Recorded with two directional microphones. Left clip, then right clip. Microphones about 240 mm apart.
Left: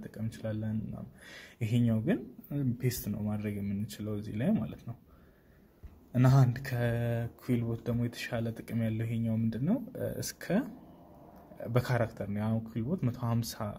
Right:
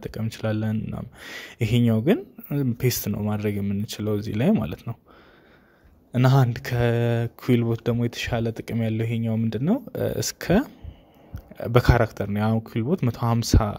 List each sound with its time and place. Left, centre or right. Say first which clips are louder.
0.0 s speech: right 11 dB; right
6.1 s speech: right 8 dB; right